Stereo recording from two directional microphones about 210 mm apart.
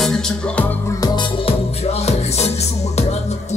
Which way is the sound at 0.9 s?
25° left (ahead or behind).